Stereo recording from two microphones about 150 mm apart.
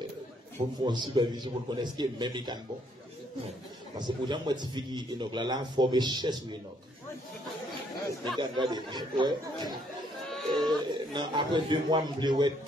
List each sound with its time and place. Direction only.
0.7 s a man's voice: 30° right (ahead or behind)
4.0 s a man's voice: 30° right (ahead or behind)
8.4 s speech: 30° right (ahead or behind)
10.3 s sheep: centre (ahead or behind)
10.7 s a man's voice: 30° right (ahead or behind)